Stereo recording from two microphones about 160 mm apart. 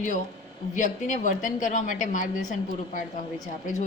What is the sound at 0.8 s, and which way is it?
A woman's voice, 50° left (ahead or behind).